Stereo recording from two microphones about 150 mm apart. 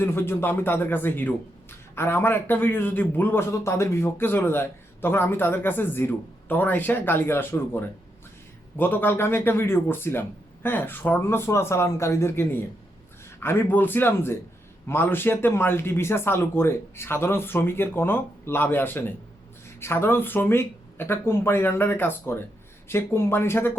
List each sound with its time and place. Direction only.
0.0 s a man's voice: 15° left (ahead or behind)